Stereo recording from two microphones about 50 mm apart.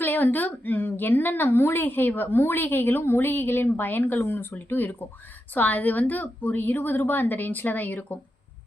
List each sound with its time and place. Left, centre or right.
0.0 s a woman's voice: left